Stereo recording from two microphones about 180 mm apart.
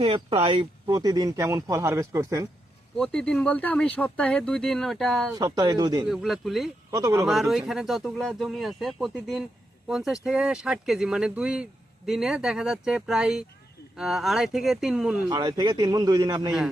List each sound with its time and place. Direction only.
0.0 s speech: 30° right (ahead or behind)
3.0 s speech: 5° left (ahead or behind)
5.3 s speech: 20° right (ahead or behind)
6.1 s speech: centre (ahead or behind)
6.9 s speech: 20° right (ahead or behind)
7.3 s speech: centre (ahead or behind)
15.3 s speech: 25° right (ahead or behind)